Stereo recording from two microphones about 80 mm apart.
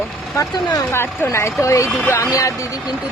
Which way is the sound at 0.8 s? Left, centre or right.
Left.